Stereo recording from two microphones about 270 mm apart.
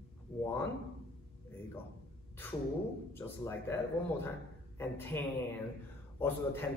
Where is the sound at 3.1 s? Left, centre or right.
Centre.